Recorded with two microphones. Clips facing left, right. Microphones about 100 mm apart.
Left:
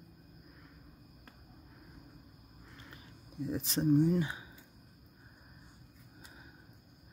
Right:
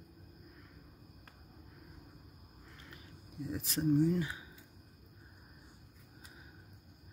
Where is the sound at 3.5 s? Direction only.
25° left (ahead or behind).